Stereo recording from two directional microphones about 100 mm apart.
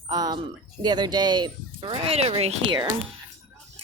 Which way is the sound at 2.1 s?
90° right.